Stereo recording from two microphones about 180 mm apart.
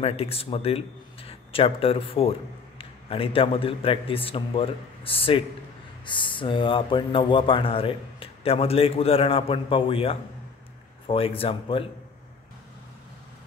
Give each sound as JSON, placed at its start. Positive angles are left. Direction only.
{"t": 0.0, "sound": "a man's voice", "side_deg": 35}